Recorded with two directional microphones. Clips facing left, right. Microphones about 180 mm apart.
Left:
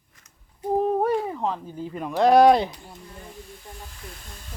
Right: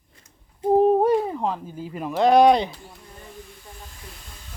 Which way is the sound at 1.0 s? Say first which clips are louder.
Right 4 dB; 15° right (ahead or behind).